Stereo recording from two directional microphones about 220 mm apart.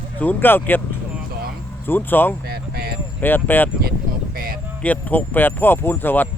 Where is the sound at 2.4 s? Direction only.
45° right (ahead or behind).